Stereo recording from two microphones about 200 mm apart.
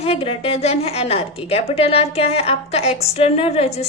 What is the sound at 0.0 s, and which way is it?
A woman's voice, 30° left (ahead or behind).